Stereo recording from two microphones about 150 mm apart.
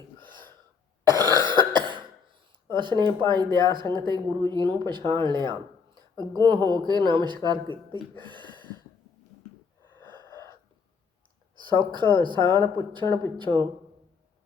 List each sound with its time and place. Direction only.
1.1 s cough: 30° right (ahead or behind)
2.7 s speech: 30° right (ahead or behind)
8.2 s a sound: 30° right (ahead or behind)
9.8 s wheeze: 15° left (ahead or behind)
10.2 s gasp: 25° right (ahead or behind)
11.5 s a sound: 30° right (ahead or behind)
11.9 s speech: 30° right (ahead or behind)